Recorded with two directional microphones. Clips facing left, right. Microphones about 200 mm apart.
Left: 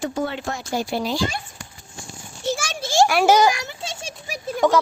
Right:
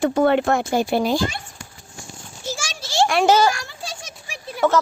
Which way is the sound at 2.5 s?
60° left (ahead or behind).